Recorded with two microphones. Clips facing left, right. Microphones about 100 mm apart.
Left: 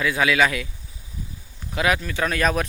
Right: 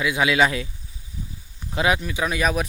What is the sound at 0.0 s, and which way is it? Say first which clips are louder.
Speech: even; 15° right (ahead or behind).